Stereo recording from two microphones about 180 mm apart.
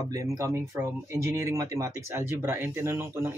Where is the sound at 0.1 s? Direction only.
20° right (ahead or behind).